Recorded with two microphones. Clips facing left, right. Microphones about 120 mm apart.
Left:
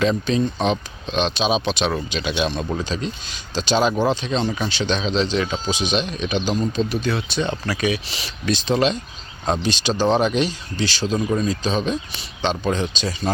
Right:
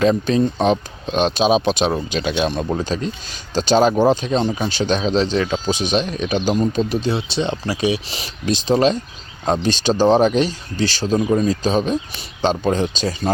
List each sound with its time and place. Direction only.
0.0 s speech: 45° right (ahead or behind)